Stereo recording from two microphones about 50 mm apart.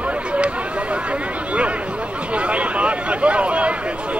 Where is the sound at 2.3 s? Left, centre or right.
Right.